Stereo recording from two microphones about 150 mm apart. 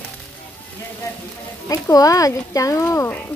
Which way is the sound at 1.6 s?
25° left (ahead or behind).